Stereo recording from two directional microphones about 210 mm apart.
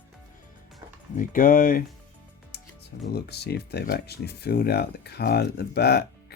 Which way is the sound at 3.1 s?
50° left (ahead or behind).